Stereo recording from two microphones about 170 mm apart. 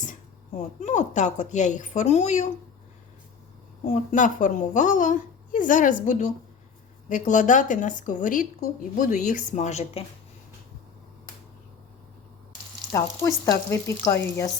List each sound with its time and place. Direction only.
0.8 s a woman's voice: 45° left (ahead or behind)
3.8 s a woman's voice: 45° left (ahead or behind)
12.9 s frying: 20° left (ahead or behind)